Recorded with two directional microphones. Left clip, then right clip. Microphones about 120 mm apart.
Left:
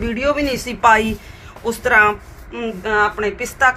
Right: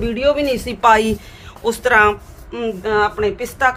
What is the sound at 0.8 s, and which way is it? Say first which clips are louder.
A woman's voice: even; 90° right.